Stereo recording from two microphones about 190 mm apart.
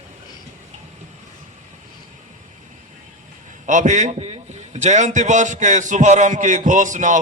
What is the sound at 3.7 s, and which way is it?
A man's voice, 40° right (ahead or behind).